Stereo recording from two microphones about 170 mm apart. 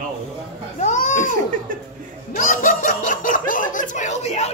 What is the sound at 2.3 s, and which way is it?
Snicker, 50° left (ahead or behind).